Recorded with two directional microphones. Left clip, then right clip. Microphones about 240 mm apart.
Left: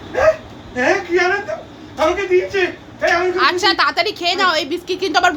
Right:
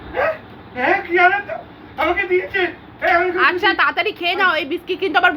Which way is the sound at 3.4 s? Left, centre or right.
Centre.